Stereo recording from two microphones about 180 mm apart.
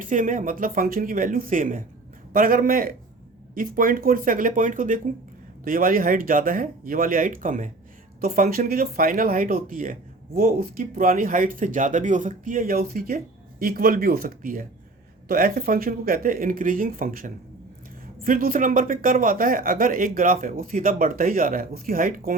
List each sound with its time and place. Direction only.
0.0 s speech: 45° right (ahead or behind)